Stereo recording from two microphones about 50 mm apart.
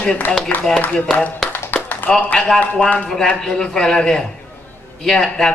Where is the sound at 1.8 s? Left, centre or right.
Left.